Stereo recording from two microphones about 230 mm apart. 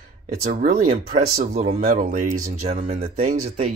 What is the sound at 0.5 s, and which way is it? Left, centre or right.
Speech, right.